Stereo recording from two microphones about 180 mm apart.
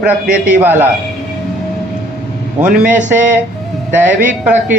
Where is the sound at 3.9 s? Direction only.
10° right (ahead or behind).